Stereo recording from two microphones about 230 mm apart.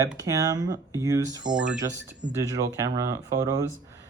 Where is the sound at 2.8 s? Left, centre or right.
Centre.